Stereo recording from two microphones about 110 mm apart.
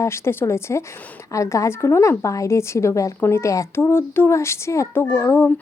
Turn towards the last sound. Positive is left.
turn(degrees=20)  # may be behind; listen again after turning